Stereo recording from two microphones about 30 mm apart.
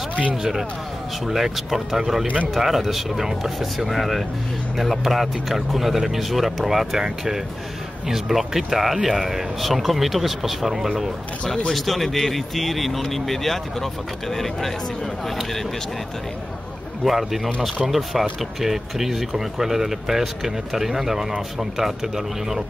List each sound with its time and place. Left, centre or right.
0.1 s speech: right
0.4 s speech: centre
5.0 s speech: centre
11.4 s speech: left
11.7 s speech: centre
17.0 s speech: centre